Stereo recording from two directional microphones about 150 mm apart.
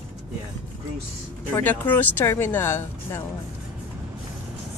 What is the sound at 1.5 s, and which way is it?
Speech, 10° left (ahead or behind).